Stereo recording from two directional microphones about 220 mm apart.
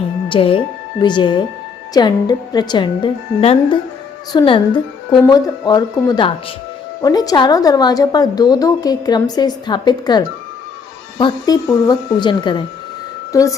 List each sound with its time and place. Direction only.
0.3 s a woman's voice: 25° left (ahead or behind)